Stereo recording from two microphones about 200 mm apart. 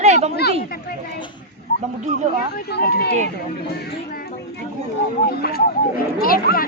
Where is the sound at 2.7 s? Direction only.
55° left (ahead or behind).